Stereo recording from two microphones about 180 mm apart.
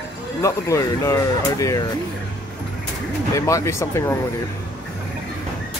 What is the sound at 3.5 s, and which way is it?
Speech, 15° left (ahead or behind).